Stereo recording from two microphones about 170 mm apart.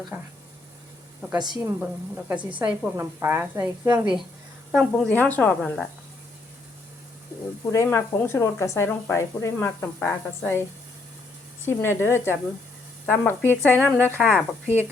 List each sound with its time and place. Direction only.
0.1 s speech: 10° right (ahead or behind)
1.4 s a woman's voice: 25° right (ahead or behind)
1.8 s speech: 5° right (ahead or behind)
2.9 s speech: 15° right (ahead or behind)
4.7 s speech: centre (ahead or behind)
7.7 s speech: 15° left (ahead or behind)
11.6 s speech: 15° left (ahead or behind)
14.2 s speech: centre (ahead or behind)